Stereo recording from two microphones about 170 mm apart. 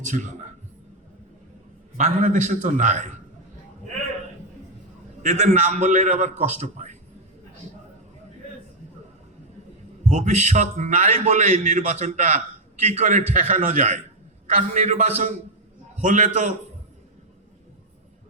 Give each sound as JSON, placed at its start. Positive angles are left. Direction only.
{"t": 0.0, "sound": "a man's voice", "side_deg": -45}
{"t": 2.0, "sound": "a man's voice", "side_deg": -45}
{"t": 5.2, "sound": "a man's voice", "side_deg": -40}
{"t": 10.1, "sound": "a man's voice", "side_deg": -45}